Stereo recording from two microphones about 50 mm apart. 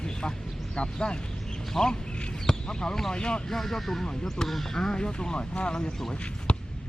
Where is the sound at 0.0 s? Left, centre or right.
Centre.